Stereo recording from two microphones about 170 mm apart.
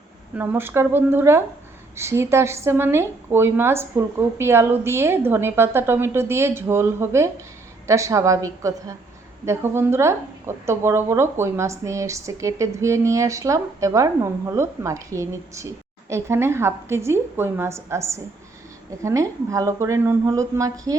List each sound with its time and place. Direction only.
0.3 s a woman's voice: 10° right (ahead or behind)